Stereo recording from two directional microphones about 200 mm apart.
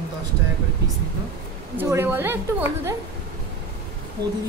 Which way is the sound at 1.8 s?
10° right (ahead or behind).